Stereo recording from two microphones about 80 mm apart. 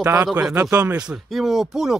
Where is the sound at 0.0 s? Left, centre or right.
Right.